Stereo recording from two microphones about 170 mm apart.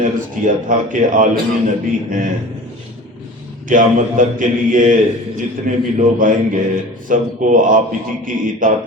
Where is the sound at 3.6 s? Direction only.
50° right (ahead or behind).